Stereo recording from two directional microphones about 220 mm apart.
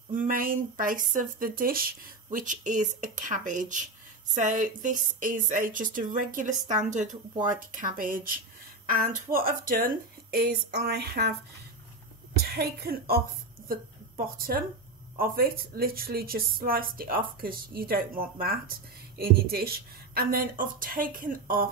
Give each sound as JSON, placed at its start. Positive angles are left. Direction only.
{"t": 0.1, "sound": "speech", "side_deg": -40}
{"t": 12.5, "sound": "a woman's voice", "side_deg": -45}